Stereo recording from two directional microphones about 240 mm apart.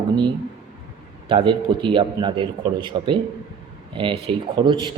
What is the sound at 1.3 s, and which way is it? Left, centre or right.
A man's voice, centre.